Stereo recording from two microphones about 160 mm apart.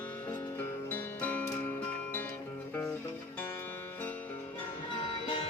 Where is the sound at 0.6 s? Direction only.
10° left (ahead or behind).